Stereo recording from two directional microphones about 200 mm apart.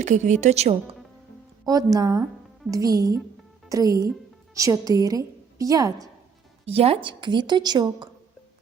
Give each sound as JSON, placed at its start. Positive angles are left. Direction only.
{"t": 0.0, "sound": "a woman's voice", "side_deg": -35}
{"t": 1.6, "sound": "a woman's voice", "side_deg": -20}
{"t": 6.7, "sound": "a woman's voice", "side_deg": -30}